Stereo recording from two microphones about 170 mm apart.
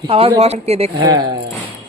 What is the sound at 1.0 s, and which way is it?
Speech, 25° right (ahead or behind).